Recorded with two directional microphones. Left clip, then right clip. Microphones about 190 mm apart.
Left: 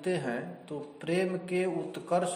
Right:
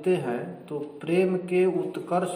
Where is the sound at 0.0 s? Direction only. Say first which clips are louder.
Right 6 dB; 45° left (ahead or behind).